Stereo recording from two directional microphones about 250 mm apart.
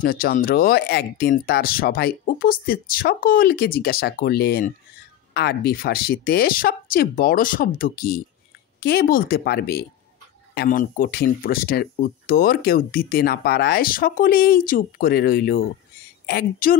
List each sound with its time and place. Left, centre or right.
0.0 s speech: left